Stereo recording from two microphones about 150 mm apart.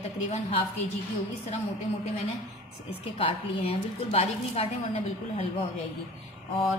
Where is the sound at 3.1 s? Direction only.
40° left (ahead or behind).